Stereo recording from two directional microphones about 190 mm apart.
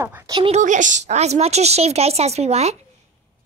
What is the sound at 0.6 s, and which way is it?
A woman's voice, 40° right (ahead or behind).